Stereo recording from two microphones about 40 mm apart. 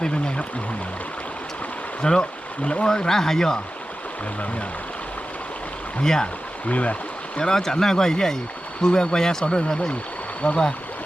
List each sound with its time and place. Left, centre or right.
0.0 s a sound: left
2.0 s speech: centre
6.0 s speech: centre
6.7 s speech: left
7.3 s speech: centre
10.4 s speech: left